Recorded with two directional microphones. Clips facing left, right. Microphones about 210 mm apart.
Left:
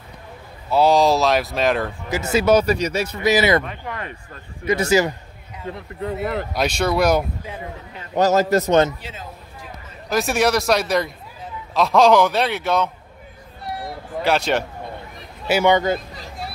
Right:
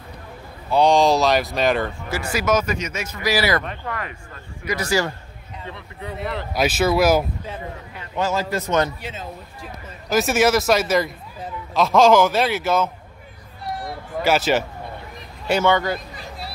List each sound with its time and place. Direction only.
0.7 s speech: 5° left (ahead or behind)
2.0 s speech: 20° left (ahead or behind)
5.7 s speech: 45° left (ahead or behind)
6.5 s speech: 5° right (ahead or behind)
8.1 s a man's voice: 40° left (ahead or behind)
10.0 s speech: centre (ahead or behind)
14.2 s speech: 5° right (ahead or behind)
15.7 s speech: 20° left (ahead or behind)